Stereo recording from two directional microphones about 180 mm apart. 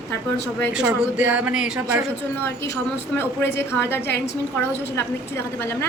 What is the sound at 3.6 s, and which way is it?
A woman's voice, 15° left (ahead or behind).